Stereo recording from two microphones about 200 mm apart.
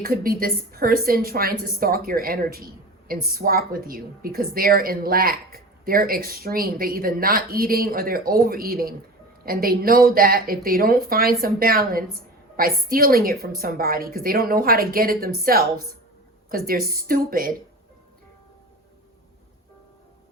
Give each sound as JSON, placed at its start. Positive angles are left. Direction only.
{"t": 0.0, "sound": "a woman's voice", "side_deg": -45}